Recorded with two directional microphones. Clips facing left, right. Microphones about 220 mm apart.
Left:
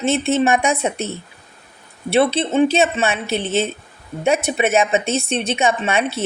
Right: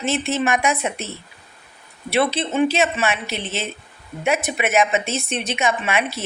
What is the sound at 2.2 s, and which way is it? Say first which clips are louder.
A woman's voice: left 4 dB; 30° left (ahead or behind).